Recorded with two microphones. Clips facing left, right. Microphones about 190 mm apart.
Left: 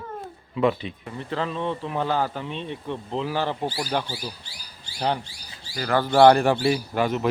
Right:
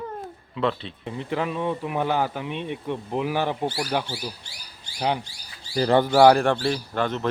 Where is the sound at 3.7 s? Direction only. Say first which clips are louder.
Right 1 dB; centre (ahead or behind).